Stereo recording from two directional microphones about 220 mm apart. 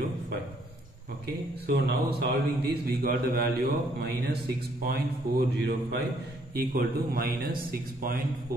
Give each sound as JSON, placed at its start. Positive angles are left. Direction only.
{"t": 1.7, "sound": "a man's voice", "side_deg": -50}